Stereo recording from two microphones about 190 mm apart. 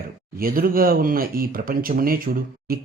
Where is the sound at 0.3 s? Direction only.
50° right (ahead or behind).